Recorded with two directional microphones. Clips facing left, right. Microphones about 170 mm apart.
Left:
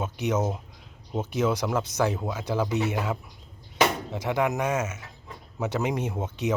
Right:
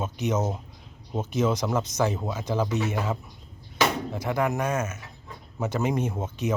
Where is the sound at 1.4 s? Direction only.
5° right (ahead or behind).